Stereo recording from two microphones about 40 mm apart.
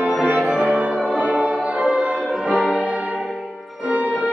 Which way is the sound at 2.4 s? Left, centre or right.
Centre.